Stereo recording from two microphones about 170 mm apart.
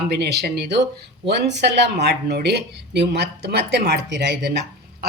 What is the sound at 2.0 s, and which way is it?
Speech, 80° right.